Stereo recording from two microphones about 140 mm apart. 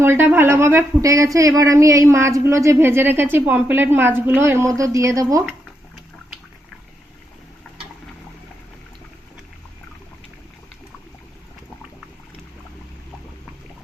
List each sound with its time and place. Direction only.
0.0 s a woman's voice: 15° right (ahead or behind)